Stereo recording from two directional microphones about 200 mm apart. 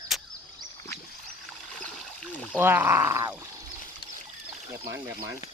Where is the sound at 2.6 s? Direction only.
10° right (ahead or behind).